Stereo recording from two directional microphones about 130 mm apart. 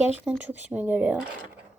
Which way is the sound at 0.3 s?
10° right (ahead or behind).